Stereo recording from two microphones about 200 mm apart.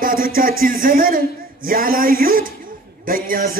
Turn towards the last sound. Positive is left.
turn(degrees=-45)  # may be behind; listen again after turning